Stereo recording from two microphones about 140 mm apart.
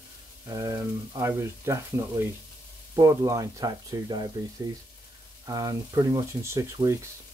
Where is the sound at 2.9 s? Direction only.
25° right (ahead or behind).